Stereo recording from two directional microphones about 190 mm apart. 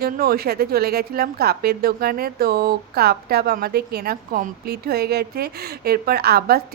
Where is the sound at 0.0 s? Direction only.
50° right (ahead or behind).